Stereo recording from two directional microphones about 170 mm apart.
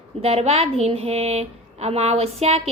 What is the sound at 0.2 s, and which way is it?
A woman's voice, 35° right (ahead or behind).